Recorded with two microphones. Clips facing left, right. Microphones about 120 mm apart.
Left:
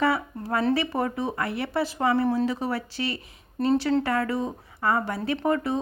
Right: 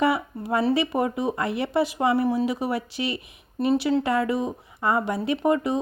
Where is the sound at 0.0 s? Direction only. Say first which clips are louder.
Right 2 dB; 20° right (ahead or behind).